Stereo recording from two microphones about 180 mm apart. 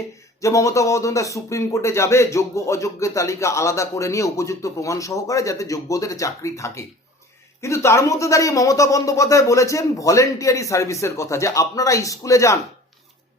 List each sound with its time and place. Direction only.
0.4 s speech: 15° left (ahead or behind)